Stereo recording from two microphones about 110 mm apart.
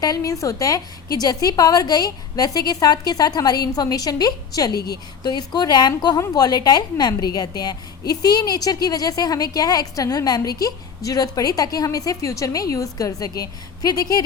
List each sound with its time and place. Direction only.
0.0 s a woman's voice: 35° left (ahead or behind)